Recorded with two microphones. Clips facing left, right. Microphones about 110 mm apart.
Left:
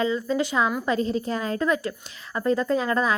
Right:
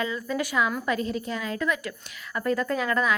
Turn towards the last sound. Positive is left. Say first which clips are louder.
# left 2 dB
turn(degrees=30)  # may be behind; listen again after turning